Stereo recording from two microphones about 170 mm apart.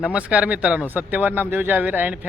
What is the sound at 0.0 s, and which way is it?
Speech, 5° right (ahead or behind).